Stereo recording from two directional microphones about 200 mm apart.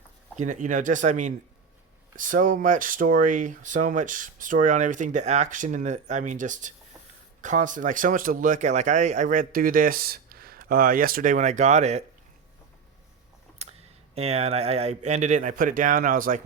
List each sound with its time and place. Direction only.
0.3 s speech: 40° right (ahead or behind)
13.6 s speech: 30° right (ahead or behind)